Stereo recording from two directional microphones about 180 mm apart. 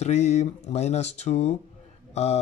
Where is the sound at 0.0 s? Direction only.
35° left (ahead or behind).